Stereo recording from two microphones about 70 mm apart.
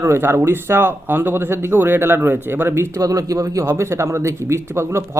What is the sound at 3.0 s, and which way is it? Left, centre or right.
Speech, right.